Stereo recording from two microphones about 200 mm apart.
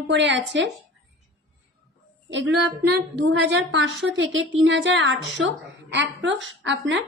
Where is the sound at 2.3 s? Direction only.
65° right (ahead or behind).